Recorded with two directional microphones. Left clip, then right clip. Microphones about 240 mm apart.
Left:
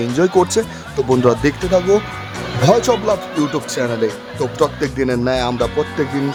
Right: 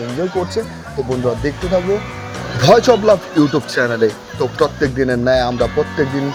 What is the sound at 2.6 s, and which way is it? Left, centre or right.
Speech, centre.